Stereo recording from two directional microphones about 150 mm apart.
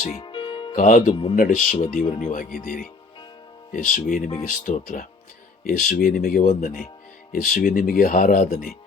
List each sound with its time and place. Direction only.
0.2 s music: 35° left (ahead or behind)
0.8 s speech: 60° left (ahead or behind)
6.4 s speech: 50° left (ahead or behind)
7.5 s speech: 70° left (ahead or behind)